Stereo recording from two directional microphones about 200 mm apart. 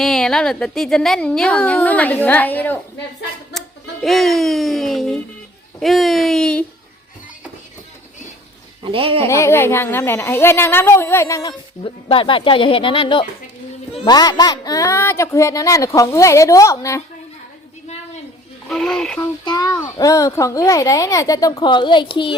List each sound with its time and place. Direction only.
0.0 s a woman's voice: centre (ahead or behind)
4.0 s a woman's voice: centre (ahead or behind)
8.8 s speech: 25° right (ahead or behind)
9.2 s a child's voice: 15° left (ahead or behind)
12.0 s a child's voice: 25° left (ahead or behind)
18.7 s a woman's voice: centre (ahead or behind)
19.2 s a child's voice: 20° left (ahead or behind)